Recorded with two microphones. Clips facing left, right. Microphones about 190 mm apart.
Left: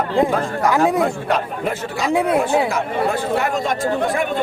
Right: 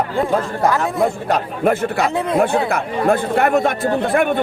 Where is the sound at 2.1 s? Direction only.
10° left (ahead or behind).